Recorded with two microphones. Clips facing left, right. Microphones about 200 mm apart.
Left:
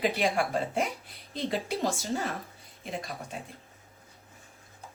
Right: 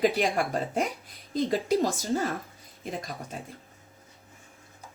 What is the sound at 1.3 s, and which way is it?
Speech, 45° right (ahead or behind).